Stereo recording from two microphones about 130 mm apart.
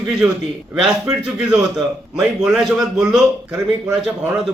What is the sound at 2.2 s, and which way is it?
A man's voice, 5° right (ahead or behind).